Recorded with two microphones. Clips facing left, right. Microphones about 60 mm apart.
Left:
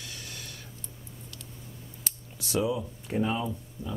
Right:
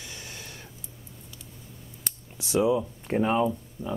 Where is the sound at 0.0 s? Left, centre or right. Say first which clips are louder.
Right 1 dB; right.